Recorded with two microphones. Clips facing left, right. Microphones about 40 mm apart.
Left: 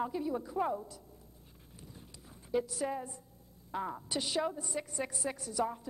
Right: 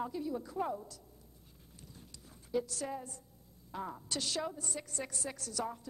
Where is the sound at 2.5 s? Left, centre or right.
Centre.